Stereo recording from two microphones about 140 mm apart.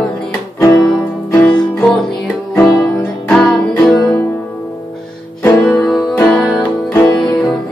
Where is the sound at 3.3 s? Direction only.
5° left (ahead or behind).